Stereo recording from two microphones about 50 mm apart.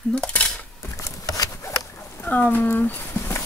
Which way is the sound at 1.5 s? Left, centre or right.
Left.